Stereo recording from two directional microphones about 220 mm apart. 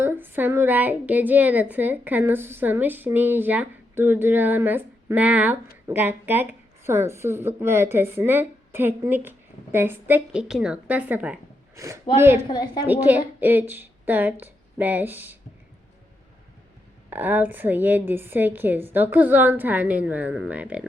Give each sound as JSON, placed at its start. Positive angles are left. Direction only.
{"t": 0.0, "sound": "speech", "side_deg": -10}
{"t": 12.5, "sound": "a woman's voice", "side_deg": 20}
{"t": 13.1, "sound": "a woman's voice", "side_deg": -10}
{"t": 17.1, "sound": "speech", "side_deg": -10}